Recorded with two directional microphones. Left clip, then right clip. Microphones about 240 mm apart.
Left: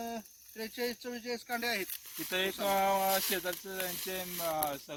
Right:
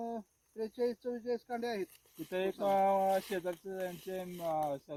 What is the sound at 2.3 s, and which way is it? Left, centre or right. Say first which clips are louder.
Speech: left 1 dB; centre.